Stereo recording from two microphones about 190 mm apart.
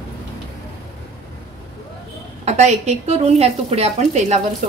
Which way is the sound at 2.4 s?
35° right (ahead or behind).